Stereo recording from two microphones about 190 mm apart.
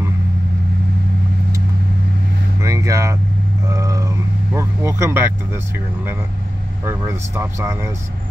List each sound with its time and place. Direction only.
2.6 s vehicle: 15° right (ahead or behind)
6.9 s speech: 15° right (ahead or behind)